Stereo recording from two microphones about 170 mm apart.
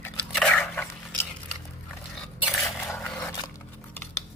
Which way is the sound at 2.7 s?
10° left (ahead or behind).